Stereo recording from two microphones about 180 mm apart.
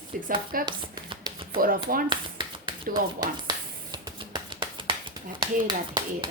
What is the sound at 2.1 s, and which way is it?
Finger snapping, 25° right (ahead or behind).